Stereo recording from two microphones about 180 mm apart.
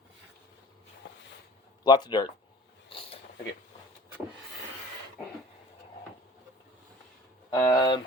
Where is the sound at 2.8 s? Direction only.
30° left (ahead or behind).